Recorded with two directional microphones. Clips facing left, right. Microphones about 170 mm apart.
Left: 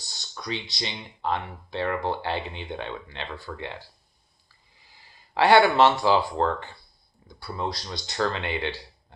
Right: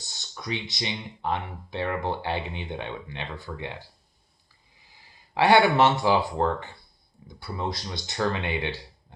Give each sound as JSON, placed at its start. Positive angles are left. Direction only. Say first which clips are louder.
{"t": 0.0, "sound": "speech", "louder": "left 1 dB", "side_deg": -20}
{"t": 5.3, "sound": "speech", "louder": "left 1 dB", "side_deg": -20}